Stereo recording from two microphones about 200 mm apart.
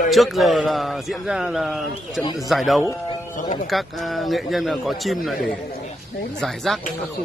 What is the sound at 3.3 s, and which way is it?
Speech, 40° left (ahead or behind).